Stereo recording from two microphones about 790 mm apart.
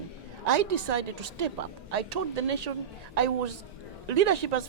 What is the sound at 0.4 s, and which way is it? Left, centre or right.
A woman's voice, right.